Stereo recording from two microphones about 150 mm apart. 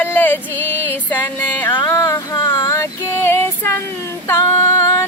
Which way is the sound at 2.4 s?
20° left (ahead or behind).